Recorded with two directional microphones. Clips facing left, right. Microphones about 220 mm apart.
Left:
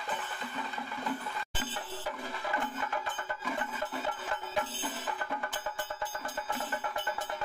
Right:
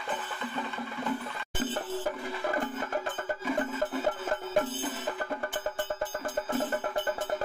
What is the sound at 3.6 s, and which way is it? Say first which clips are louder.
Music: right 7 dB; 45° right (ahead or behind).